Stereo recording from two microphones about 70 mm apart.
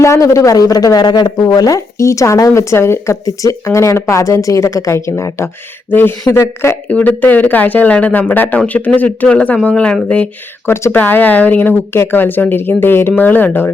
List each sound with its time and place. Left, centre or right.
0.0 s speech: left
1.5 s a woman's voice: left
3.2 s a woman's voice: left
5.9 s speech: left
6.3 s speech: left
6.8 s speech: left
10.7 s speech: left
10.9 s speech: left